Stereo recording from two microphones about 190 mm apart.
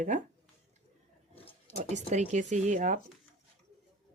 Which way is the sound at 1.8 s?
40° right (ahead or behind).